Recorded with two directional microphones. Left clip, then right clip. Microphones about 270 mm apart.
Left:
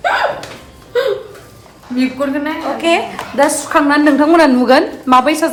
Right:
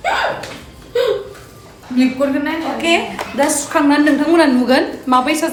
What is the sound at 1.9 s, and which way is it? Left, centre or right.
Speech, centre.